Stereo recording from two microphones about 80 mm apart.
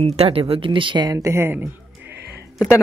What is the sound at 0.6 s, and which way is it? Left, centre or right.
Speech, right.